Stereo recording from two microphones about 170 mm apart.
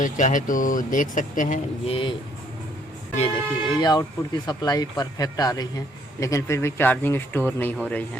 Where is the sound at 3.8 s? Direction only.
25° left (ahead or behind).